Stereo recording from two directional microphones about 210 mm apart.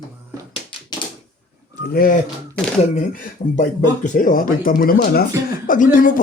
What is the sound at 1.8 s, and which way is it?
Speech, 45° left (ahead or behind).